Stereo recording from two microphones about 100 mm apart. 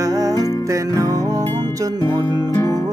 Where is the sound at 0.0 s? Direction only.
35° right (ahead or behind).